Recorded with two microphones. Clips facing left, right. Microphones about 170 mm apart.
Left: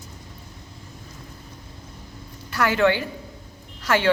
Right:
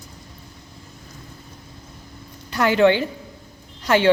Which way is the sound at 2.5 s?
20° right (ahead or behind).